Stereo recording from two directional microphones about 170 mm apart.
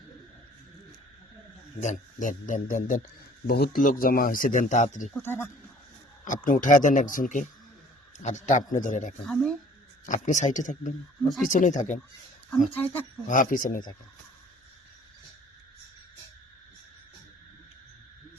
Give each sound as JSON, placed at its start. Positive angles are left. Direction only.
{"t": 1.8, "sound": "speech", "side_deg": 45}
{"t": 3.4, "sound": "speech", "side_deg": 65}
{"t": 5.2, "sound": "speech", "side_deg": 15}
{"t": 6.2, "sound": "speech", "side_deg": 50}
{"t": 9.2, "sound": "speech", "side_deg": 5}
{"t": 10.1, "sound": "speech", "side_deg": 45}
{"t": 12.7, "sound": "speech", "side_deg": 10}
{"t": 13.2, "sound": "speech", "side_deg": 50}